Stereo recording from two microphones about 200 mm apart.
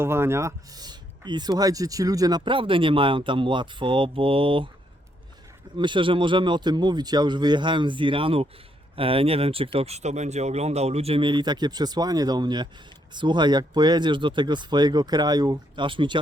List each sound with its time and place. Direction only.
0.0 s speech: 10° right (ahead or behind)
5.7 s speech: 25° right (ahead or behind)